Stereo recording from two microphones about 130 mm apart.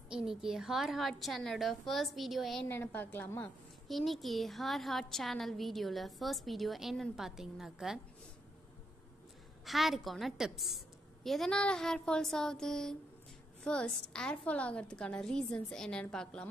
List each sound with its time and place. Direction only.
0.1 s a woman's voice: 5° right (ahead or behind)
2.7 s a woman's voice: 15° left (ahead or behind)
3.9 s a woman's voice: centre (ahead or behind)
9.7 s a woman's voice: centre (ahead or behind)